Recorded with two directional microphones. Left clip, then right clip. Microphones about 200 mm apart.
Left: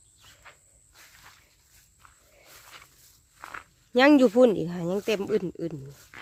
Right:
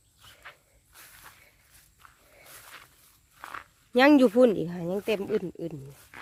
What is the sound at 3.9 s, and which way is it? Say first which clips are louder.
Speech: left 1 dB; centre (ahead or behind).